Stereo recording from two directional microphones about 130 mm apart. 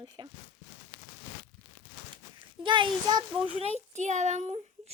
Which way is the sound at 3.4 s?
55° right (ahead or behind).